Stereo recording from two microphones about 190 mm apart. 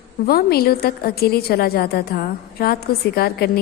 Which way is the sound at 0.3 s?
55° left (ahead or behind).